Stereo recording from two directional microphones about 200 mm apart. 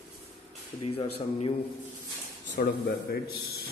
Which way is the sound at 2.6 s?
50° left (ahead or behind).